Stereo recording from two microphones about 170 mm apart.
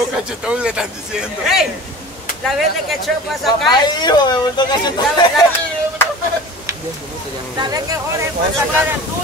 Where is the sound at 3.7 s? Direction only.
25° left (ahead or behind).